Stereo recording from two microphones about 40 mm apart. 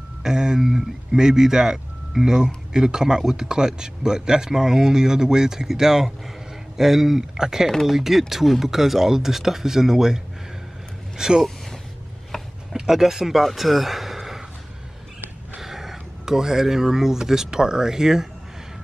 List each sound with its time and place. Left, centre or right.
0.2 s speech: centre
12.7 s speech: centre
15.6 s speech: centre